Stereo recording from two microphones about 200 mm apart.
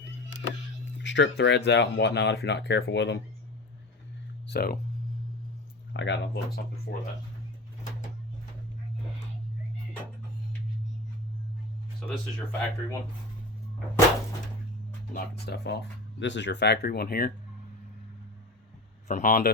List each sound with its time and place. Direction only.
1.0 s speech: 60° left (ahead or behind)
4.4 s speech: 50° left (ahead or behind)
5.9 s speech: 60° left (ahead or behind)
11.9 s speech: 10° left (ahead or behind)
15.1 s speech: 55° left (ahead or behind)
19.0 s speech: 40° left (ahead or behind)